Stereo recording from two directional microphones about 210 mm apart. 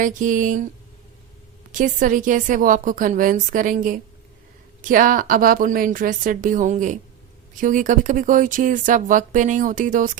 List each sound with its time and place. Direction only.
0.0 s speech: 40° right (ahead or behind)
1.7 s speech: 40° right (ahead or behind)